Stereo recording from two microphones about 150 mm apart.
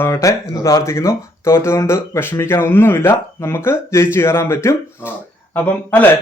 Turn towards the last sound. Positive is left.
turn(degrees=10)  # may be behind; listen again after turning